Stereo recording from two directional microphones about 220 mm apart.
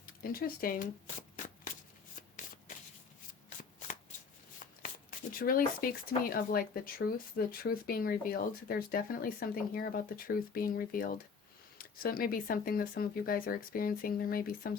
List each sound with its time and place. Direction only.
0.0 s speech: 40° left (ahead or behind)
2.4 s shuffling cards: 35° left (ahead or behind)
5.4 s speech: 40° left (ahead or behind)